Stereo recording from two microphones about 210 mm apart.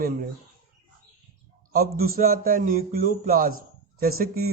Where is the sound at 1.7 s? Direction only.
45° right (ahead or behind).